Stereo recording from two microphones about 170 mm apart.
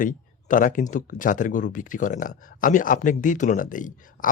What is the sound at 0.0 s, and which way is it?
Speech, 50° left (ahead or behind).